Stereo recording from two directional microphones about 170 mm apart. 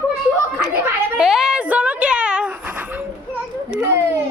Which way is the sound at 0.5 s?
5° right (ahead or behind).